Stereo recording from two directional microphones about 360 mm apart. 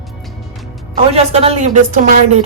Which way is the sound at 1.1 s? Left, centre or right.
Centre.